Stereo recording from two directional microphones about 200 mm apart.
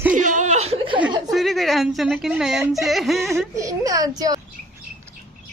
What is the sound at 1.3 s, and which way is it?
A woman's voice, centre (ahead or behind).